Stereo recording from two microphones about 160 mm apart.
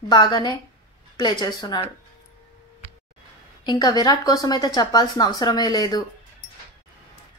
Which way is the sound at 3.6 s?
25° left (ahead or behind).